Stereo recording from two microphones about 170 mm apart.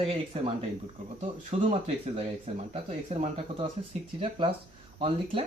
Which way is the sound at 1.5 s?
35° right (ahead or behind).